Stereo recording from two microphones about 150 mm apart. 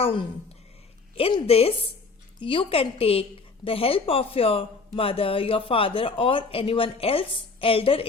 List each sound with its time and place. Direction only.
0.0 s a woman's voice: 35° left (ahead or behind)